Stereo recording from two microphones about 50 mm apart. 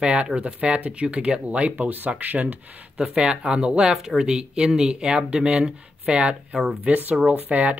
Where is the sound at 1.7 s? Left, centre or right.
Right.